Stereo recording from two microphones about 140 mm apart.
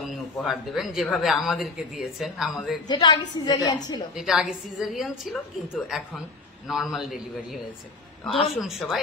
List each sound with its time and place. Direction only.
0.0 s speech: centre (ahead or behind)
2.9 s a woman's voice: 30° left (ahead or behind)
4.2 s speech: 5° right (ahead or behind)
8.5 s speech: centre (ahead or behind)